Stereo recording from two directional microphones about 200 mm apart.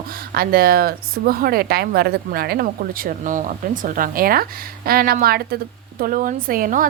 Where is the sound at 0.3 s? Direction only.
45° right (ahead or behind).